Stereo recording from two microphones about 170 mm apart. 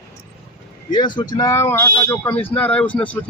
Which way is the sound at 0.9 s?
25° left (ahead or behind).